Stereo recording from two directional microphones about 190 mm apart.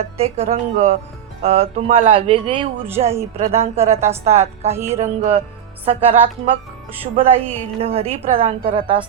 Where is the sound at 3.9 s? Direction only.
15° right (ahead or behind).